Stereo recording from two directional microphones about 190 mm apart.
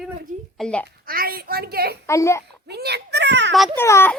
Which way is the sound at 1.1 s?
50° right (ahead or behind).